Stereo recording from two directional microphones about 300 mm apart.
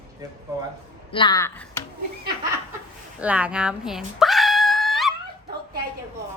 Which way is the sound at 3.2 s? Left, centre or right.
Centre.